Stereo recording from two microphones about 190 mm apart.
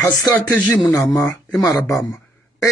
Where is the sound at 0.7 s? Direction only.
5° left (ahead or behind).